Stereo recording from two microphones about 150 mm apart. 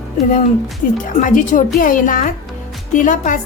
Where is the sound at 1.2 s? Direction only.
60° left (ahead or behind).